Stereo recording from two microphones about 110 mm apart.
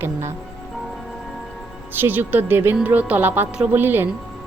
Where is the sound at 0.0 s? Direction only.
25° right (ahead or behind).